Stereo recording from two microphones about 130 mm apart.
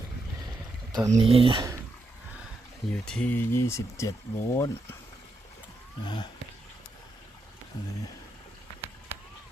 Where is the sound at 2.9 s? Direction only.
10° left (ahead or behind).